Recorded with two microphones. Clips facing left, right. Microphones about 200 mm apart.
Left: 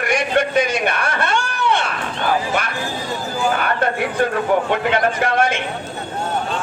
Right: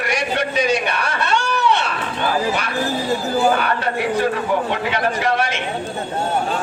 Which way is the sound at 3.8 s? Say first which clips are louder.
Even; 50° left (ahead or behind).